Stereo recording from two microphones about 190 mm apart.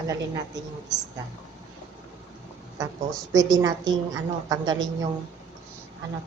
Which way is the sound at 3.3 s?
20° right (ahead or behind).